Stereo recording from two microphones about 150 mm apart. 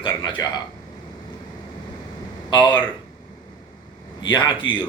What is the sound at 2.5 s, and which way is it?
Speech, 30° left (ahead or behind).